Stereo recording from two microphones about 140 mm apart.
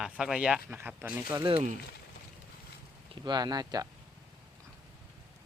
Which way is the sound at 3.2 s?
30° right (ahead or behind).